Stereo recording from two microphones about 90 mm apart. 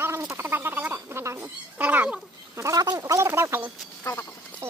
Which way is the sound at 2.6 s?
40° right (ahead or behind).